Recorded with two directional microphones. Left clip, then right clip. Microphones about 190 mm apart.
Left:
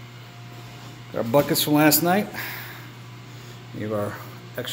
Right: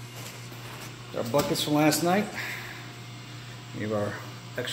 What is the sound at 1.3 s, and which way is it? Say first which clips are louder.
Speech: left 6 dB; 55° left (ahead or behind).